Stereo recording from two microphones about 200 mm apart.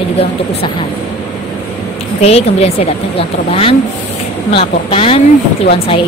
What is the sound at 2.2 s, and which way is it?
A woman's voice, 30° left (ahead or behind).